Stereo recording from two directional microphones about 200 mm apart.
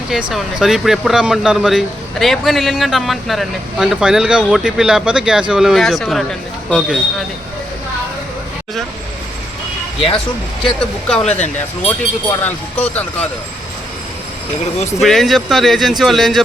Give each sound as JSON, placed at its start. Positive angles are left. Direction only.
{"t": 0.1, "sound": "speech", "side_deg": -5}
{"t": 10.6, "sound": "speech", "side_deg": 5}
{"t": 15.0, "sound": "speech", "side_deg": 0}